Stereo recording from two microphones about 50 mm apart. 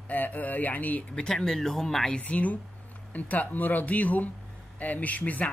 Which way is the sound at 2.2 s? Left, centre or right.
Left.